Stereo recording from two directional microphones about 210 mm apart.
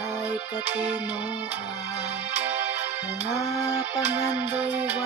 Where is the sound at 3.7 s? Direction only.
10° right (ahead or behind).